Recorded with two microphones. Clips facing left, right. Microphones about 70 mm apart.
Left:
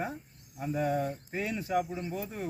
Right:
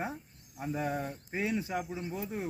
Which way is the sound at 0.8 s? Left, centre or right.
Centre.